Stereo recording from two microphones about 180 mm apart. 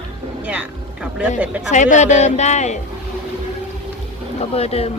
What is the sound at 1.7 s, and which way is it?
A man's voice, 45° left (ahead or behind).